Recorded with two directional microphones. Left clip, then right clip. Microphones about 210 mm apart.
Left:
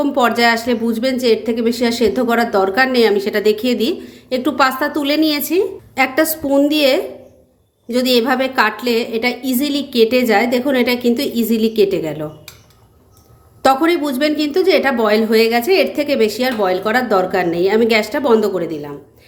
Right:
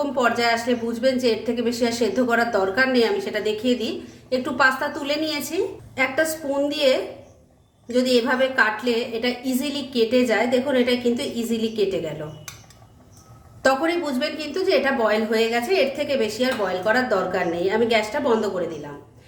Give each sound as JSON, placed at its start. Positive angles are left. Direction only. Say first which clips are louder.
{"t": 0.0, "sound": "a woman's voice", "louder": "left 7 dB", "side_deg": 40}
{"t": 13.6, "sound": "a woman's voice", "louder": "left 7 dB", "side_deg": 40}